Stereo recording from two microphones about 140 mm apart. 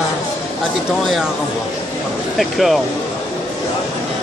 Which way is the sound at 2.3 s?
Centre (ahead or behind).